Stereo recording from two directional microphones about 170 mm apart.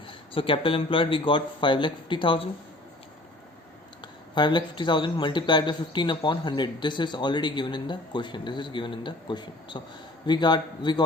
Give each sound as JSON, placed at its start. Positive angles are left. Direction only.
{"t": 0.1, "sound": "speech", "side_deg": 30}
{"t": 4.4, "sound": "speech", "side_deg": 25}